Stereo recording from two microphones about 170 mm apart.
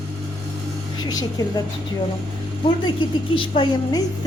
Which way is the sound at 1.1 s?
20° left (ahead or behind).